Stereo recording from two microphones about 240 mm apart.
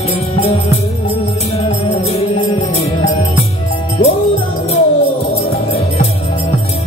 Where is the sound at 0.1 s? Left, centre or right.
Left.